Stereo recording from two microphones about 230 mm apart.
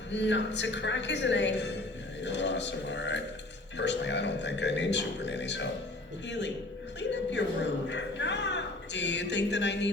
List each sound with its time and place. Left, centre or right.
0.1 s a man's voice: left